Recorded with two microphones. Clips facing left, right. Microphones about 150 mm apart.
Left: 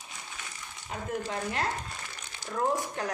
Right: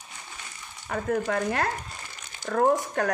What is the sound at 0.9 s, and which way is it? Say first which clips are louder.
Speech: right 7 dB; 65° right (ahead or behind).